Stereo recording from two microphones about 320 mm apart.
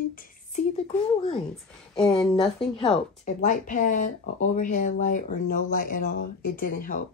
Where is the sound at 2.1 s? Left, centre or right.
Centre.